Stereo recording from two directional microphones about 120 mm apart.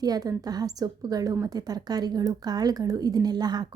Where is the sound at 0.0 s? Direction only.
30° right (ahead or behind).